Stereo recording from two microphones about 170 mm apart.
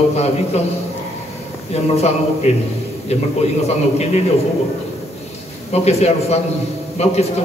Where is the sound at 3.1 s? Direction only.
40° left (ahead or behind).